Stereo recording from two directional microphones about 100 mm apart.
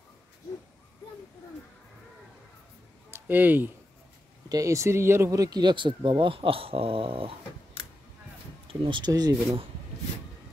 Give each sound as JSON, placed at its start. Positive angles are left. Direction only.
{"t": 3.1, "sound": "speech", "side_deg": -20}
{"t": 4.5, "sound": "speech", "side_deg": -35}
{"t": 8.6, "sound": "speech", "side_deg": -55}
{"t": 9.1, "sound": "speech", "side_deg": -40}